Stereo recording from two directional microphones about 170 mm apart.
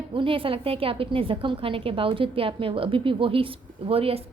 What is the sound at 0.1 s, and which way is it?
A woman's voice, 30° right (ahead or behind).